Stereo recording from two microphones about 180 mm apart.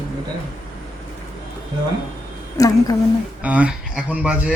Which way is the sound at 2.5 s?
20° left (ahead or behind).